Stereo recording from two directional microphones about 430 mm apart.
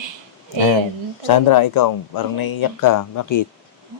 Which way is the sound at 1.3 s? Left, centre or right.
Left.